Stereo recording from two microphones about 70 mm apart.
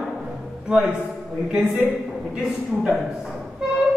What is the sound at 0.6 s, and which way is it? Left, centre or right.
Speech, centre.